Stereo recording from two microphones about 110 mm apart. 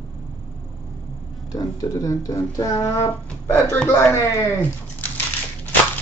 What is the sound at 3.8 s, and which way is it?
Speech, 15° left (ahead or behind).